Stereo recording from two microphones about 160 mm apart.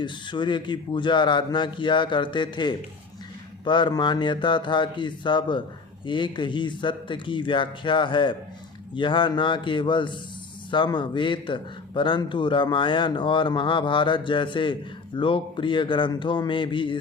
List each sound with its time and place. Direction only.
0.0 s a man's voice: 30° left (ahead or behind)